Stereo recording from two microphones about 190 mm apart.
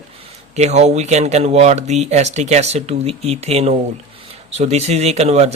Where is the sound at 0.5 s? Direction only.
35° right (ahead or behind).